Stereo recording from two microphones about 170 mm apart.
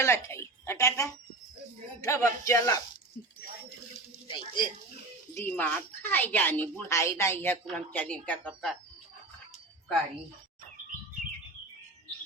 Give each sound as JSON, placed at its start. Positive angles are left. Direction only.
{"t": 0.0, "sound": "a woman's voice", "side_deg": 15}
{"t": 4.3, "sound": "speech", "side_deg": 30}
{"t": 5.4, "sound": "a woman's voice", "side_deg": 10}
{"t": 7.6, "sound": "a woman's voice", "side_deg": 5}